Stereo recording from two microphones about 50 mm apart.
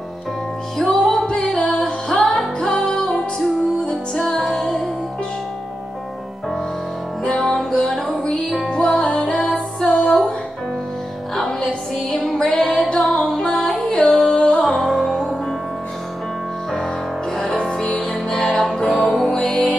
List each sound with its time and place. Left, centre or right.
0.7 s music: centre
7.2 s music: centre
11.3 s music: centre
13.6 s music: centre
17.4 s music: centre
19.3 s music: left